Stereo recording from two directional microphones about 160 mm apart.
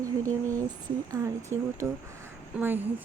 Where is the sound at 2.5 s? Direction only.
10° right (ahead or behind).